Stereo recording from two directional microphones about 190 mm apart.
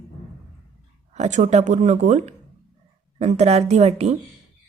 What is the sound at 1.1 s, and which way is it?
Speech, 40° right (ahead or behind).